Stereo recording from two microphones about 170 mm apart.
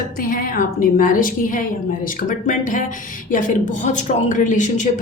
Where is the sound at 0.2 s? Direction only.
55° left (ahead or behind).